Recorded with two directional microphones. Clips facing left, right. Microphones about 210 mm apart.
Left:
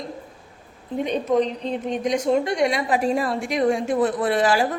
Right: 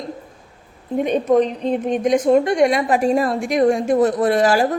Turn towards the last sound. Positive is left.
turn(degrees=-40)  # may be behind; listen again after turning